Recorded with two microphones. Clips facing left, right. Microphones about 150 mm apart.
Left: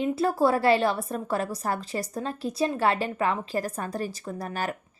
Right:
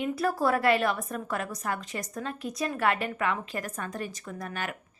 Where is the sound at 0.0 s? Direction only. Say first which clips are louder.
Left 4 dB; 25° left (ahead or behind).